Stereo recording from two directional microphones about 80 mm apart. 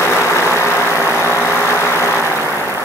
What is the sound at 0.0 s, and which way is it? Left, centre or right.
Vehicle, left.